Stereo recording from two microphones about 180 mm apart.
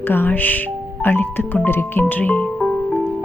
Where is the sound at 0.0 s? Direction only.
10° left (ahead or behind).